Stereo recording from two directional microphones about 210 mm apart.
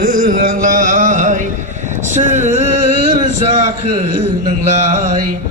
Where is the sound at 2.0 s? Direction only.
35° right (ahead or behind).